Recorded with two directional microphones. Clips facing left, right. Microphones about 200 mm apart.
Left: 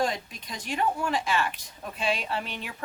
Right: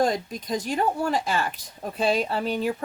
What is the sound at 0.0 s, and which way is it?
A woman's voice, 40° right (ahead or behind).